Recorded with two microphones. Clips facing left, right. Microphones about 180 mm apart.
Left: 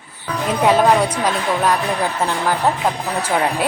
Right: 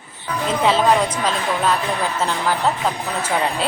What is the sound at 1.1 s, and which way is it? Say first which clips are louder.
Speech: left 2 dB; 10° left (ahead or behind).